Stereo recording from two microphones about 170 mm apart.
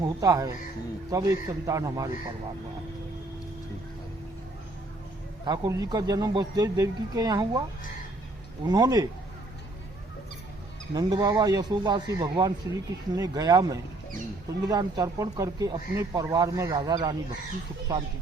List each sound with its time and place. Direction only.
0.0 s a man's voice: 20° right (ahead or behind)
5.5 s a man's voice: 20° right (ahead or behind)
8.7 s a man's voice: 20° right (ahead or behind)
10.9 s a man's voice: 20° right (ahead or behind)